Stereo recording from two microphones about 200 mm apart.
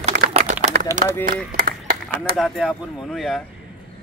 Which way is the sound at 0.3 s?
35° right (ahead or behind).